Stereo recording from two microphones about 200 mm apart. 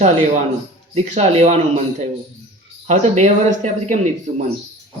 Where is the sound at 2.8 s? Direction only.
35° right (ahead or behind).